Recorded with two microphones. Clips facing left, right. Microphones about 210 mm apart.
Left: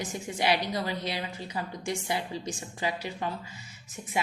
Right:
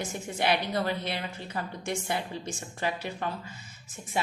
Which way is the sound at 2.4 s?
10° left (ahead or behind).